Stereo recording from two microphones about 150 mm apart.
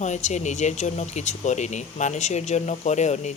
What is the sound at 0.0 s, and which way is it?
Speech, 50° left (ahead or behind).